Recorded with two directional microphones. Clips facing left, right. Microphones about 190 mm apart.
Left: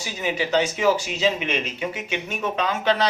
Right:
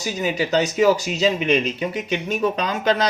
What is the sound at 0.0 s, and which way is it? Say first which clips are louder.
Speech: right 3 dB; 40° right (ahead or behind).